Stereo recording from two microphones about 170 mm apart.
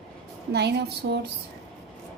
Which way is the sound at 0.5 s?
75° right (ahead or behind).